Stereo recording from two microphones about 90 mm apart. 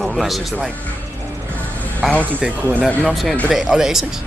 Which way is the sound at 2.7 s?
15° left (ahead or behind).